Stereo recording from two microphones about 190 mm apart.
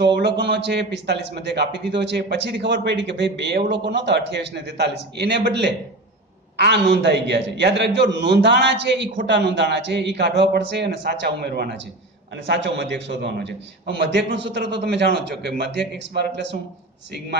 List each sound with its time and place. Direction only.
0.0 s a man's voice: 65° right (ahead or behind)